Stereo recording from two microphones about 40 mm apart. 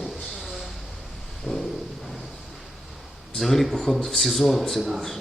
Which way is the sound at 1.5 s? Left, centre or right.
Left.